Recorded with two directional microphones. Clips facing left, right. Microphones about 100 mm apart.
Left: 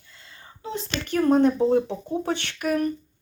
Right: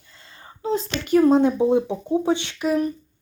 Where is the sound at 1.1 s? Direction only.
15° right (ahead or behind).